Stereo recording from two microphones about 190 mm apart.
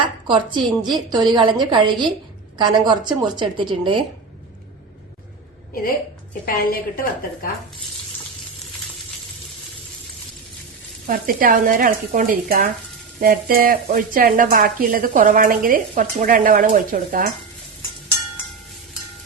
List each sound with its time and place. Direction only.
0.0 s a woman's voice: 25° right (ahead or behind)
6.4 s a woman's voice: 50° left (ahead or behind)
11.0 s speech: 50° right (ahead or behind)